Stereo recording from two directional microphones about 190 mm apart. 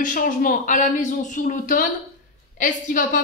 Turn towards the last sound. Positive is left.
turn(degrees=45)  # may be behind; listen again after turning